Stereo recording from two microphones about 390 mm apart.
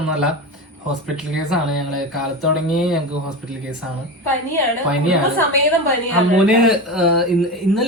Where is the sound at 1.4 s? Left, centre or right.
Left.